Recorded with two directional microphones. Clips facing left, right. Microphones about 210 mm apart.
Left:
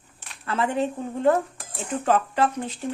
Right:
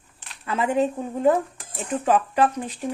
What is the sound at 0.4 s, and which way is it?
Speech, 15° right (ahead or behind).